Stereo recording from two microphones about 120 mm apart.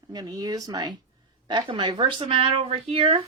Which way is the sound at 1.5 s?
40° right (ahead or behind).